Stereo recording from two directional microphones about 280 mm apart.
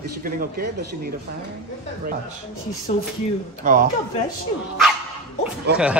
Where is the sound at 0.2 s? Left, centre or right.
Right.